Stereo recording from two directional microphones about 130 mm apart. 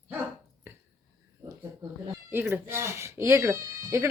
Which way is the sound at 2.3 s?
15° right (ahead or behind).